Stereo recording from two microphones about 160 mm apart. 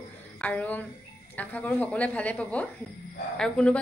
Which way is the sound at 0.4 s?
10° left (ahead or behind).